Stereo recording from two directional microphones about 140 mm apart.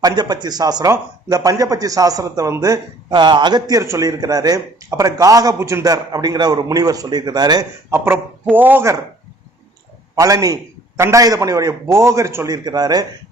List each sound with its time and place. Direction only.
0.0 s a man's voice: 30° right (ahead or behind)
7.9 s speech: 15° right (ahead or behind)
10.2 s a man's voice: 25° right (ahead or behind)